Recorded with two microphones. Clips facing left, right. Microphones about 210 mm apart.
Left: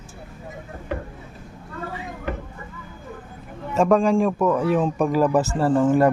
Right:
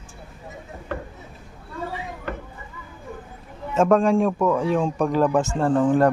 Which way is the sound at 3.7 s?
Centre (ahead or behind).